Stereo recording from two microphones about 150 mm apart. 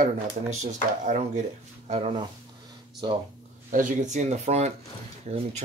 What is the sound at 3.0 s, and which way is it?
Speech, 25° right (ahead or behind).